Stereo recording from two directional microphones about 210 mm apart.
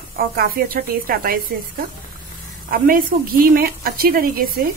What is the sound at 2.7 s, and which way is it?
Speech, 40° right (ahead or behind).